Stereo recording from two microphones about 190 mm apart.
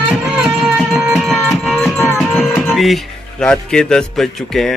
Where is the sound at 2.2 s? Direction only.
Centre (ahead or behind).